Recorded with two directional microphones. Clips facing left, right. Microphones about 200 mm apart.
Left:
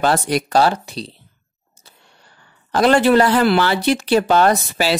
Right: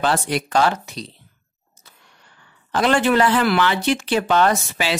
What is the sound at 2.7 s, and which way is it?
Speech, 40° left (ahead or behind).